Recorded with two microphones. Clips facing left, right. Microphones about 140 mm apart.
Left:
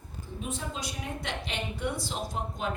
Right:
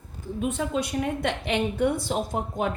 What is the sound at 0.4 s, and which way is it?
A woman's voice, 60° right (ahead or behind).